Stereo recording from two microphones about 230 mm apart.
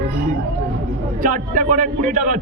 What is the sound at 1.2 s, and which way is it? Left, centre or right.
Speech, right.